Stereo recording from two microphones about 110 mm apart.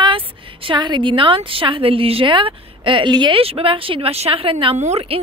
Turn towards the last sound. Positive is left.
turn(degrees=-70)  # may be behind; listen again after turning